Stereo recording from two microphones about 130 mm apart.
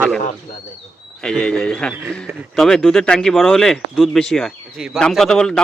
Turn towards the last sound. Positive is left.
turn(degrees=5)  # may be behind; listen again after turning